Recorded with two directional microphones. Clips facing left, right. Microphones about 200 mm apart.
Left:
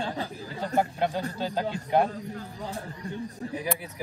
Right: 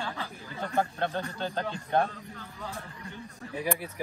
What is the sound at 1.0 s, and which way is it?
A man's voice, 10° left (ahead or behind).